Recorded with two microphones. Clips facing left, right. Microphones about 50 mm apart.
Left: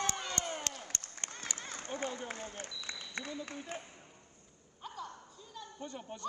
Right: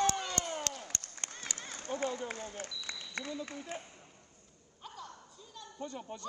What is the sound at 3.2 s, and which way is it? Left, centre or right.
Speech, left.